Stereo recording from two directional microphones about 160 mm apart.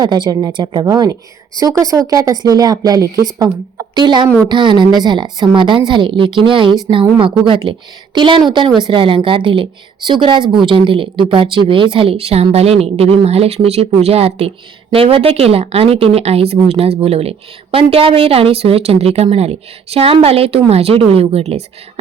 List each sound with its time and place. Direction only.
0.0 s a woman's voice: 25° right (ahead or behind)